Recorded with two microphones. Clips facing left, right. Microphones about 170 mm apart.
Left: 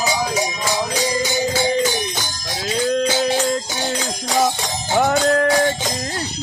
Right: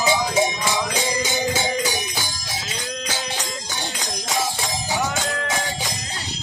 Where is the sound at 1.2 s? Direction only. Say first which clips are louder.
Left 4 dB; 15° right (ahead or behind).